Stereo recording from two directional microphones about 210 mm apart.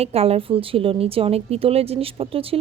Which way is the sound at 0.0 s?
30° right (ahead or behind).